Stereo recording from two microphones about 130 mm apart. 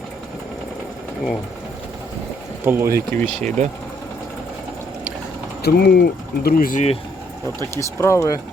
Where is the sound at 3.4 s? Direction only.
65° right (ahead or behind).